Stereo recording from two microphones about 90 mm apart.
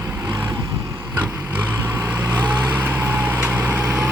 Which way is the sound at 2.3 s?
20° right (ahead or behind).